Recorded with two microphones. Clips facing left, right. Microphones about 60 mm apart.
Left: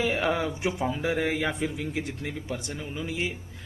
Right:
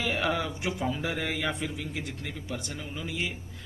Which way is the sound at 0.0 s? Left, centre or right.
Centre.